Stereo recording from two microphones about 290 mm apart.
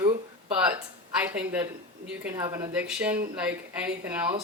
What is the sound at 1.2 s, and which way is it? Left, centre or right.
Speech, centre.